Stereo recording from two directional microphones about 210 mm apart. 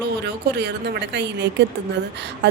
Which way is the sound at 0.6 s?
55° right (ahead or behind).